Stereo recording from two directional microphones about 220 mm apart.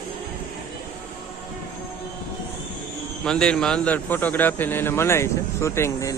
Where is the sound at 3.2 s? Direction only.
5° left (ahead or behind).